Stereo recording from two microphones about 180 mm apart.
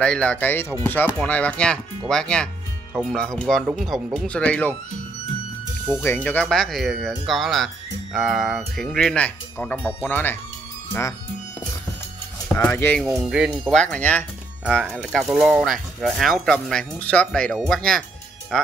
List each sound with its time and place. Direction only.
0.0 s speech: 5° left (ahead or behind)
6.0 s speech: 10° left (ahead or behind)
12.5 s speech: 10° left (ahead or behind)
13.3 s speech: centre (ahead or behind)
14.8 s speech: 5° right (ahead or behind)